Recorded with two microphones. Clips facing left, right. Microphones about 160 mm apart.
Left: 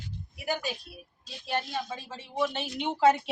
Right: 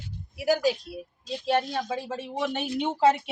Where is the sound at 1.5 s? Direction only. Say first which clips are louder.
Right 6 dB; 70° right (ahead or behind).